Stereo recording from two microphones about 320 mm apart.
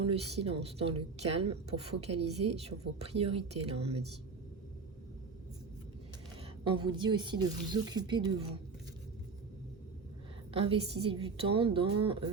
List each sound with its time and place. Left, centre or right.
0.1 s a woman's voice: centre
6.7 s a woman's voice: centre
10.5 s a woman's voice: centre